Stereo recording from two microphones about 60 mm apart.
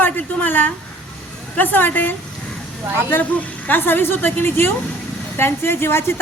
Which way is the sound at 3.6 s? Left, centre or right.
Left.